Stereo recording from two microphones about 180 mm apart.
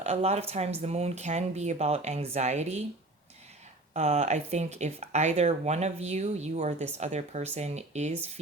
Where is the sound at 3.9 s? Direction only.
40° right (ahead or behind).